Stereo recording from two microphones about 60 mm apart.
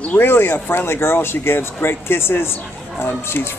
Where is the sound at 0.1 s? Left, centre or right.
Left.